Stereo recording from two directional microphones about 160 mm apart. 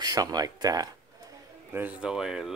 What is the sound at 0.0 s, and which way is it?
Speech, 25° right (ahead or behind).